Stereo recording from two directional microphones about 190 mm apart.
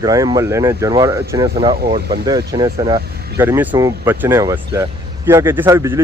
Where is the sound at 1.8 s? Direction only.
50° right (ahead or behind).